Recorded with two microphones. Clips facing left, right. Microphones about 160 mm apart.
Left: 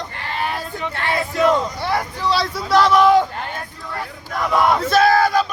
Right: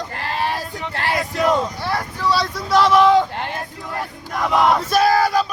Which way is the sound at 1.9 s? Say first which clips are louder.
Left 2 dB; 20° left (ahead or behind).